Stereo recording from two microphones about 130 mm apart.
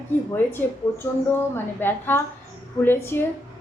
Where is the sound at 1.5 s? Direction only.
15° left (ahead or behind).